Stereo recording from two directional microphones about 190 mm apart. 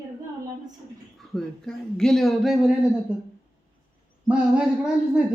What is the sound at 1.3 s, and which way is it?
Speech, 5° left (ahead or behind).